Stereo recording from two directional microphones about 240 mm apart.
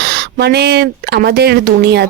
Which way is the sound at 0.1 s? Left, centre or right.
Right.